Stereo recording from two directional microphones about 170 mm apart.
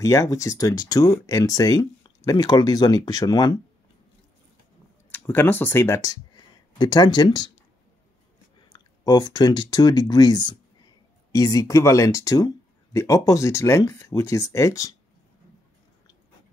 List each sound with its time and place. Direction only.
0.0 s speech: 20° left (ahead or behind)
5.1 s speech: 10° left (ahead or behind)
8.6 s speech: 25° left (ahead or behind)